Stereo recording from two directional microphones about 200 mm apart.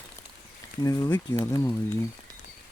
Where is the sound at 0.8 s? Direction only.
20° left (ahead or behind).